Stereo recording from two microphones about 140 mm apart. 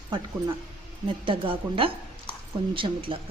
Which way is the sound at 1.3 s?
40° right (ahead or behind).